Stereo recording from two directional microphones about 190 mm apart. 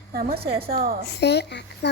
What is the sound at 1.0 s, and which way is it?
Speech, 60° left (ahead or behind).